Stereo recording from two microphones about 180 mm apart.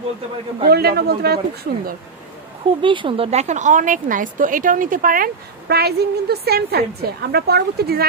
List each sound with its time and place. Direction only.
0.7 s speech: 60° right (ahead or behind)
2.8 s a woman's voice: 30° right (ahead or behind); by 8.1 s 60° right (ahead or behind)